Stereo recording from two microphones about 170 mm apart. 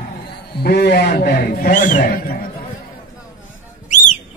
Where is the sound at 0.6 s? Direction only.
70° left (ahead or behind).